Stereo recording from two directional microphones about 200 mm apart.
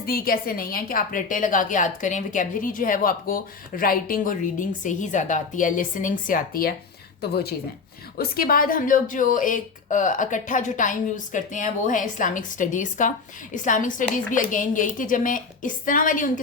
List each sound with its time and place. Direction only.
0.0 s a woman's voice: 50° left (ahead or behind)